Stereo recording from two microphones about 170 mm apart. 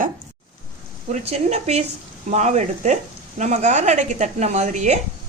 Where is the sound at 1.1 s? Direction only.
40° right (ahead or behind).